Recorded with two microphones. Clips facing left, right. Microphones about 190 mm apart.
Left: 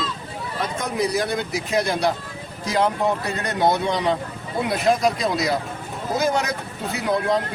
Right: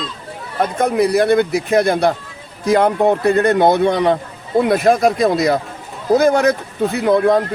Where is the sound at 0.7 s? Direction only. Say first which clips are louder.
Right 9 dB; 60° right (ahead or behind).